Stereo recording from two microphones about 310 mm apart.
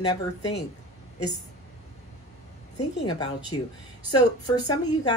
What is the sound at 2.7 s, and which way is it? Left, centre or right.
A woman's voice, centre.